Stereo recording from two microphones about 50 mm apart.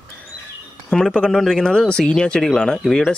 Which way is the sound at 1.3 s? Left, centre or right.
Centre.